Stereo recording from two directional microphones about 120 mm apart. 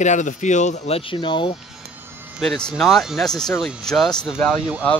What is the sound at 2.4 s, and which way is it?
Speech, centre (ahead or behind).